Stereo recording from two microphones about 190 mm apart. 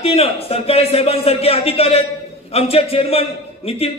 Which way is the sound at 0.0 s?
30° left (ahead or behind).